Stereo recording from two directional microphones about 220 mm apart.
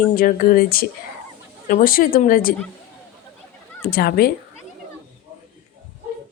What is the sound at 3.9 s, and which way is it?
Speech, 45° left (ahead or behind).